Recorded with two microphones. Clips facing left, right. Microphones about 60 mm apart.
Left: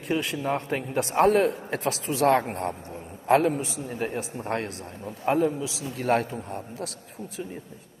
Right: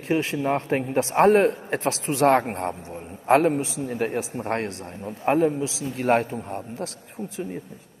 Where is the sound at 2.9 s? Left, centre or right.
Right.